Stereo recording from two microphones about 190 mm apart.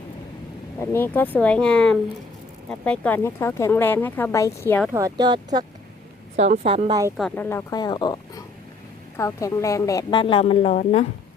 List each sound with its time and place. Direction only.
0.8 s speech: 10° left (ahead or behind)
4.9 s speech: 15° right (ahead or behind)
6.3 s a woman's voice: 40° right (ahead or behind)
7.2 s a woman's voice: 5° left (ahead or behind); by 11.0 s 35° left (ahead or behind)